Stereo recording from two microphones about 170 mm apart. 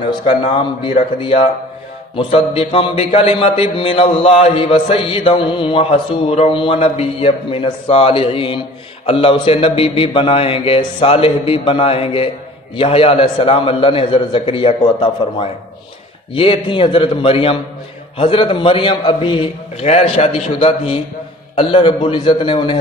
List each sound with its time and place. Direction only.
1.2 s a man's voice: 30° left (ahead or behind)